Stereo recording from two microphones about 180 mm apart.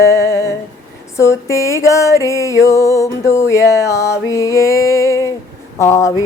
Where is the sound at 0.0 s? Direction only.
15° left (ahead or behind).